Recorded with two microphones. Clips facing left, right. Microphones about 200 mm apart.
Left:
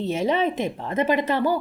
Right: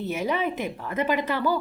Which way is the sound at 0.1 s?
25° left (ahead or behind).